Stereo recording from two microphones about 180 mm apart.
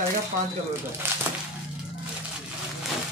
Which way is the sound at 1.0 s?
10° right (ahead or behind).